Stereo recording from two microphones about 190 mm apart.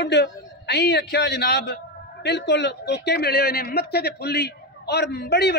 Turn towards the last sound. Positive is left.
turn(degrees=60)  # may be behind; listen again after turning